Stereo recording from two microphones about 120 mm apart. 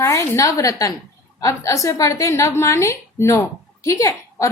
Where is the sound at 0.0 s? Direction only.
25° left (ahead or behind).